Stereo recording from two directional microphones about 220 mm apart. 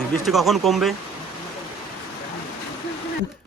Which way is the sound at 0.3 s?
Centre (ahead or behind).